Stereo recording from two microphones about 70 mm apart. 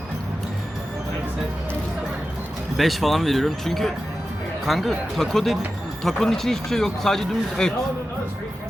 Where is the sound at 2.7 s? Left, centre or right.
Centre.